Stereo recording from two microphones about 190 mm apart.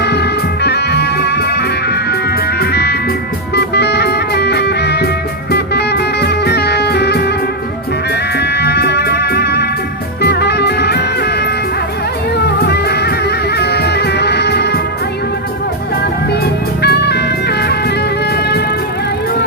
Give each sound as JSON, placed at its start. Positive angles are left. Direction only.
{"t": 0.0, "sound": "music", "side_deg": 60}
{"t": 16.8, "sound": "music", "side_deg": 60}